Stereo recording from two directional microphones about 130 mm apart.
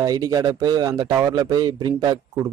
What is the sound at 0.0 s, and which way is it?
Speech, 30° right (ahead or behind).